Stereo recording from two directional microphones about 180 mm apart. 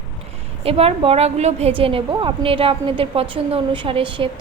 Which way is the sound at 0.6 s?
35° right (ahead or behind).